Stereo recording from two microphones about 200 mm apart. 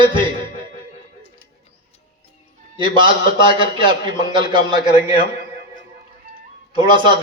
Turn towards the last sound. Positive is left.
turn(degrees=-25)  # may be behind; listen again after turning